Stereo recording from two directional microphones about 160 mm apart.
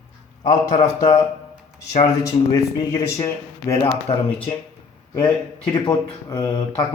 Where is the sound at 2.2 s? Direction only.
20° left (ahead or behind).